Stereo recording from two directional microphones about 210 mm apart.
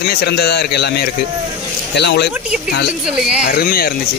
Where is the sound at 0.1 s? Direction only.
50° left (ahead or behind).